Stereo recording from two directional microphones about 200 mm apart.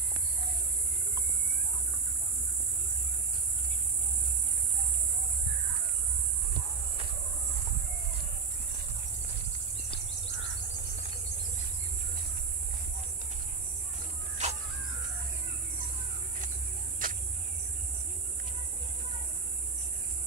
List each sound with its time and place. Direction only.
14.4 s crow: 35° right (ahead or behind)
17.0 s cricket: 45° right (ahead or behind)